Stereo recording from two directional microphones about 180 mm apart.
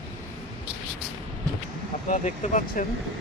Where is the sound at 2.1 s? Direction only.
40° left (ahead or behind).